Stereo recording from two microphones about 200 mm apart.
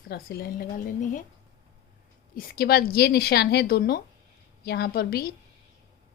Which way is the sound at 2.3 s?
50° left (ahead or behind).